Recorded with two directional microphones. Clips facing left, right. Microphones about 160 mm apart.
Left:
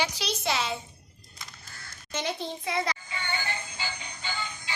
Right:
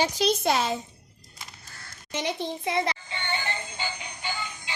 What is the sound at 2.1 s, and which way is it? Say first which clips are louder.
A child's voice: right 2 dB; 15° right (ahead or behind).